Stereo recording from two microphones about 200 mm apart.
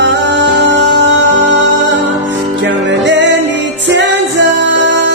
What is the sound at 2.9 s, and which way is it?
Music, 65° right (ahead or behind).